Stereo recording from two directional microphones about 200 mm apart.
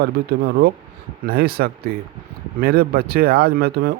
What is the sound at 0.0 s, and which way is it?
Speech, 50° right (ahead or behind).